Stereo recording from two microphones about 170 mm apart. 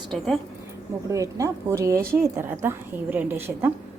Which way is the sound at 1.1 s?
20° right (ahead or behind).